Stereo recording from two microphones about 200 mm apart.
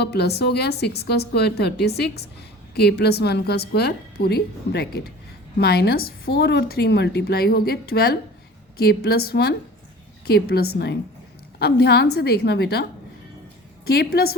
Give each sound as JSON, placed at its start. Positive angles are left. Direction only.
{"t": 0.0, "sound": "a woman's voice", "side_deg": 55}
{"t": 13.8, "sound": "a woman's voice", "side_deg": 50}